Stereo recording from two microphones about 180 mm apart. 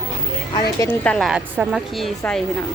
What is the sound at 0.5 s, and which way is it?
Speech, 20° left (ahead or behind).